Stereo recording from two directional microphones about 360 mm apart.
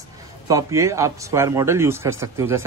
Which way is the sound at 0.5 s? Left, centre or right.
Centre.